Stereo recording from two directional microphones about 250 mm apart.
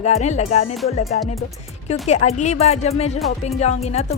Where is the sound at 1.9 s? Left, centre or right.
Left.